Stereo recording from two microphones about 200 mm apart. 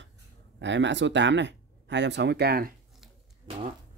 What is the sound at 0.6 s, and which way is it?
Speech, 65° right (ahead or behind).